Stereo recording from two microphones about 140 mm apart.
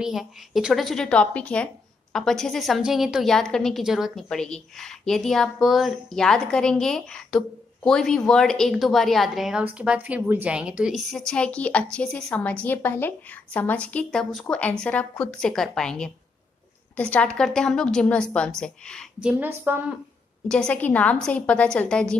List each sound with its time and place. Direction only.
0.0 s a woman's voice: centre (ahead or behind)
11.1 s a woman's voice: 5° left (ahead or behind)
19.2 s a woman's voice: 15° right (ahead or behind)
20.4 s a woman's voice: 5° left (ahead or behind)